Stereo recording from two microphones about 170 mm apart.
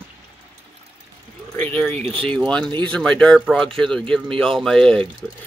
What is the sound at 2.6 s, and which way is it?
Speech, 25° right (ahead or behind).